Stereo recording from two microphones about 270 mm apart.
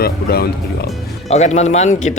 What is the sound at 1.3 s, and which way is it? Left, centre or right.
Speech, left.